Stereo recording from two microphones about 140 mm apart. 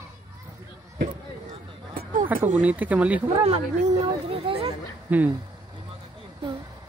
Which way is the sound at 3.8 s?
40° right (ahead or behind).